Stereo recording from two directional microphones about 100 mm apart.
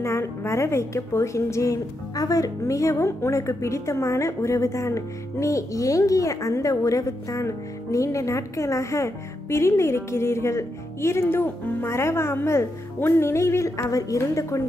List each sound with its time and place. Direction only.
0.0 s a woman's voice: 25° left (ahead or behind)